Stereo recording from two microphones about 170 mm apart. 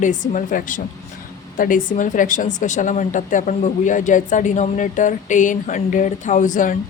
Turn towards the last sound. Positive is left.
turn(degrees=50)  # may be behind; listen again after turning